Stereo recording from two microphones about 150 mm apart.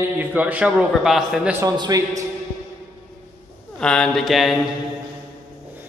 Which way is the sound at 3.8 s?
5° left (ahead or behind).